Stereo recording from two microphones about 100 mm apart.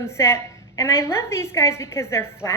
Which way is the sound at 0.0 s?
25° left (ahead or behind).